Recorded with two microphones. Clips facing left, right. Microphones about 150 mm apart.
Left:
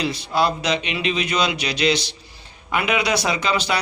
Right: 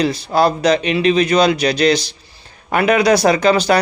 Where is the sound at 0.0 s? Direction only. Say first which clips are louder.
Right 6 dB; 40° right (ahead or behind).